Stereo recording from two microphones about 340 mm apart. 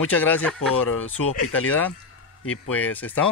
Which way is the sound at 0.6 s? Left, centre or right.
Left.